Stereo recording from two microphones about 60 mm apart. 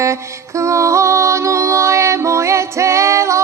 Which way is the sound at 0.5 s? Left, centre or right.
Right.